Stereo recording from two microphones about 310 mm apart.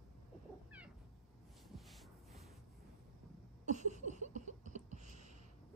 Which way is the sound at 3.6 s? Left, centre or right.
Right.